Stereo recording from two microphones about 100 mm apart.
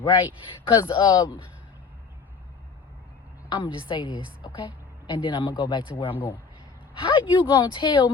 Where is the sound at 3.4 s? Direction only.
55° left (ahead or behind).